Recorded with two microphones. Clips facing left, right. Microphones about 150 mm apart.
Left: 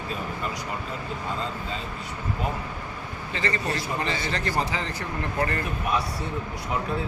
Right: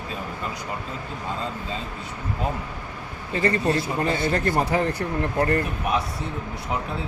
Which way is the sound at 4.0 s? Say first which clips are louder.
Right 6 dB; 50° right (ahead or behind).